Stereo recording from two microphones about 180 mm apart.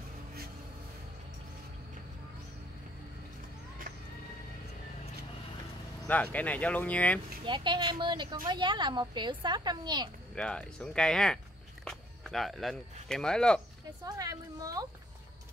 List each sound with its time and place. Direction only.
6.0 s speech: 10° left (ahead or behind)
7.4 s a woman's voice: 25° right (ahead or behind)
10.3 s speech: 5° left (ahead or behind)
14.0 s a woman's voice: 20° right (ahead or behind)